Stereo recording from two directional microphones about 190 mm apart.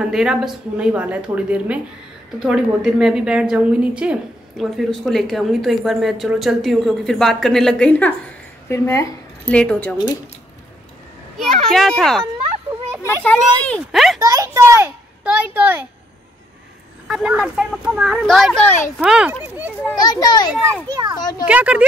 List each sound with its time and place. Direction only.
0.0 s a woman's voice: 5° right (ahead or behind)
11.7 s a woman's voice: centre (ahead or behind)
13.2 s a woman's voice: 5° left (ahead or behind)
14.2 s a sound: 15° right (ahead or behind)
17.1 s a woman's voice: 5° right (ahead or behind)
18.9 s a woman's voice: 5° right (ahead or behind)
20.0 s a child's voice: 20° left (ahead or behind)
20.9 s a child's voice: 20° right (ahead or behind)
21.2 s a child's voice: 20° left (ahead or behind)
21.5 s speech: 5° right (ahead or behind)